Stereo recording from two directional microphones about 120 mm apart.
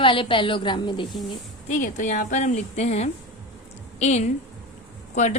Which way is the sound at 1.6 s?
85° left.